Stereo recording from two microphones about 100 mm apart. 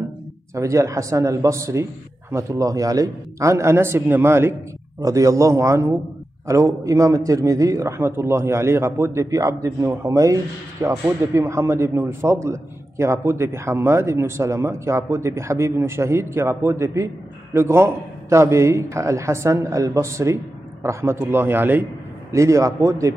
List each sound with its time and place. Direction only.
0.6 s a man's voice: 30° right (ahead or behind)
22.3 s a man's voice: 30° right (ahead or behind)